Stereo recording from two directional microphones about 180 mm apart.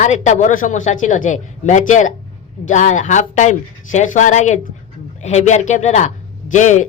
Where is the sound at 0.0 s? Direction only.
40° left (ahead or behind).